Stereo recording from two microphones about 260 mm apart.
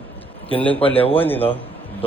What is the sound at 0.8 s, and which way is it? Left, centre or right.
Speech, left.